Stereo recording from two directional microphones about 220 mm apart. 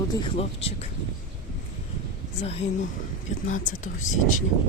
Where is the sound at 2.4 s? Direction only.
30° left (ahead or behind).